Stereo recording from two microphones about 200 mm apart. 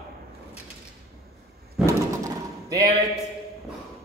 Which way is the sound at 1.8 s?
15° right (ahead or behind).